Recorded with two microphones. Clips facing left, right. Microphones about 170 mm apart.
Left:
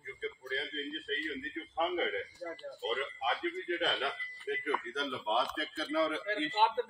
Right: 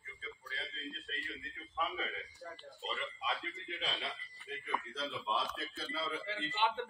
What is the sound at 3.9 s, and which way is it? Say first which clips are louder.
Speech: left 7 dB; 65° left (ahead or behind).